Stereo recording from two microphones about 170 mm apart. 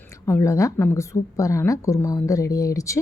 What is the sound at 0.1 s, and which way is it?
A woman's voice, 15° left (ahead or behind).